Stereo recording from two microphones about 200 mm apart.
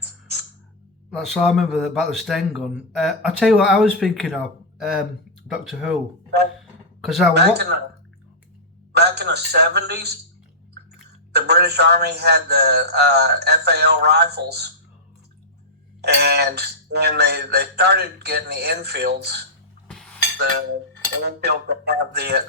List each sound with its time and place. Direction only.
0.0 s a sound: 55° right (ahead or behind)
1.1 s a man's voice: centre (ahead or behind)
6.6 s a sound: centre (ahead or behind)
7.3 s music: 55° right (ahead or behind)
9.0 s music: 55° right (ahead or behind)
11.3 s music: 55° right (ahead or behind)
16.0 s music: 55° right (ahead or behind)
19.9 s chink: 5° left (ahead or behind)
21.2 s dishes: 55° right (ahead or behind)